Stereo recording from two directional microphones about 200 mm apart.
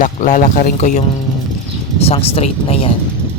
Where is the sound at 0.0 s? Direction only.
40° left (ahead or behind).